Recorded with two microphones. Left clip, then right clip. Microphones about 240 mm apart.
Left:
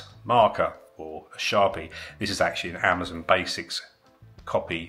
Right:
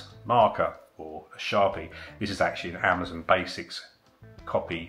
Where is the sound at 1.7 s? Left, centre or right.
Centre.